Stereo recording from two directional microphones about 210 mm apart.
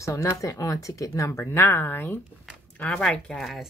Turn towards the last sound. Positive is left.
turn(degrees=0)  # may be behind; listen again after turning